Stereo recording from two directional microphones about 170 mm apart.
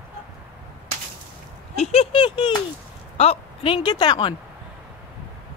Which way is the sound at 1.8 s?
35° left (ahead or behind).